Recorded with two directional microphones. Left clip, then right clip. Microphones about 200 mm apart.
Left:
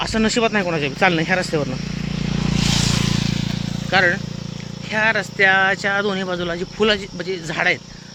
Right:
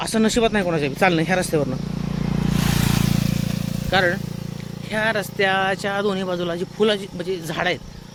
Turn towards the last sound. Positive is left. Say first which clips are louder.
# left 3 dB
turn(degrees=-10)  # may be behind; listen again after turning